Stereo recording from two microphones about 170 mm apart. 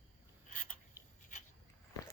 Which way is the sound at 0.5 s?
50° left (ahead or behind).